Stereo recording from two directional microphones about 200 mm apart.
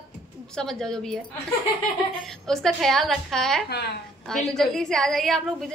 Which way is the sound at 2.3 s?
Centre (ahead or behind).